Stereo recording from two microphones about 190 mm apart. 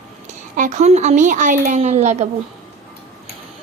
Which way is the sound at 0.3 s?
40° right (ahead or behind).